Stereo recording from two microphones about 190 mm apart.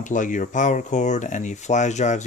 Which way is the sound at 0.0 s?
40° left (ahead or behind).